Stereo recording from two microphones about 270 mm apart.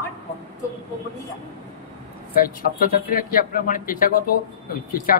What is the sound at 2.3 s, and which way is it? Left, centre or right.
Speech, left.